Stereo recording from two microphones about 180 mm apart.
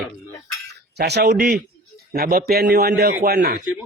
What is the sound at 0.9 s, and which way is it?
A man's voice, 65° right (ahead or behind).